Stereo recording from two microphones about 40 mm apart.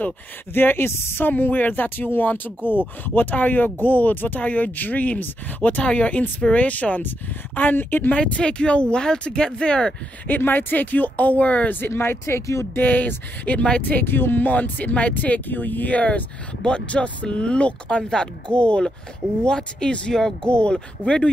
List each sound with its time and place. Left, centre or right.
0.6 s speech: left
1.2 s speech: left
5.8 s speech: left
7.0 s speech: left
8.2 s speech: left
10.2 s speech: left
11.7 s speech: left
12.7 s speech: left
13.6 s speech: left
14.0 s speech: left
14.5 s speech: left; by 20.3 s centre
20.4 s speech: left